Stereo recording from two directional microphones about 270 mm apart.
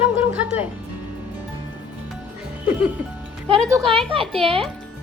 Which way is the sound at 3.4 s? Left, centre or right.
Centre.